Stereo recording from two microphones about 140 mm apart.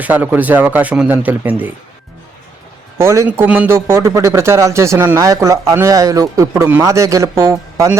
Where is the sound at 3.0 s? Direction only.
20° right (ahead or behind).